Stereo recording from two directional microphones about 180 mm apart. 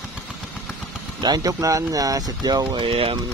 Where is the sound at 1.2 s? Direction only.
20° right (ahead or behind).